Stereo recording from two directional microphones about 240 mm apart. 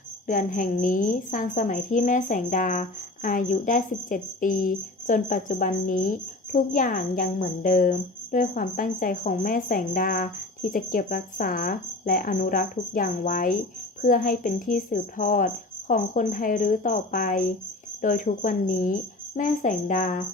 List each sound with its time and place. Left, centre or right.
0.3 s a woman's voice: left